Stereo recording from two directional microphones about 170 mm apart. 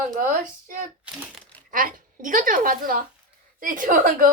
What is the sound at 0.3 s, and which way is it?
A woman's voice, 50° right (ahead or behind).